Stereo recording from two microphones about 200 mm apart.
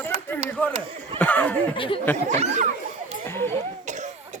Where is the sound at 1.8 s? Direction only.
25° left (ahead or behind).